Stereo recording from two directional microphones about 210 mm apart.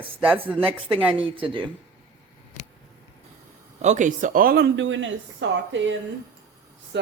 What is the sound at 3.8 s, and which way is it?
Speech, 35° right (ahead or behind).